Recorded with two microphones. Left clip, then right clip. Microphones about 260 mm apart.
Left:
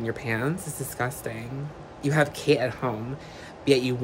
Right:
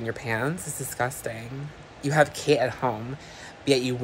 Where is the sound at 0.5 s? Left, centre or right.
Left.